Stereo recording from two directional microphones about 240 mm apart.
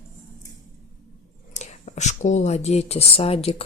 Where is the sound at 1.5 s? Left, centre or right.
Left.